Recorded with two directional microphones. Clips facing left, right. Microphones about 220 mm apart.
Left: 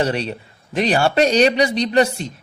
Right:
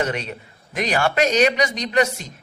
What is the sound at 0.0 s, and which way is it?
Speech, 30° left (ahead or behind).